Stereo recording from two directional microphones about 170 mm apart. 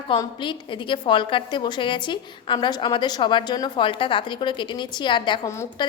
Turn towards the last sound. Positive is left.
turn(degrees=15)  # may be behind; listen again after turning